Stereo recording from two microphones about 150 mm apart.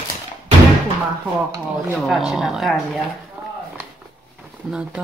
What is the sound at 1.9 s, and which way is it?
Speech, centre (ahead or behind).